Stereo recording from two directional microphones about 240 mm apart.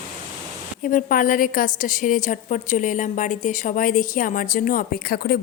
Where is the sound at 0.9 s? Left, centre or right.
Left.